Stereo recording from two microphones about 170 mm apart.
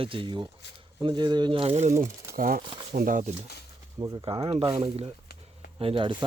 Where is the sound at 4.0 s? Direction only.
25° right (ahead or behind).